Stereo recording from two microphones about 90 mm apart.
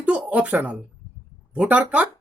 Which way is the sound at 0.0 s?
15° right (ahead or behind).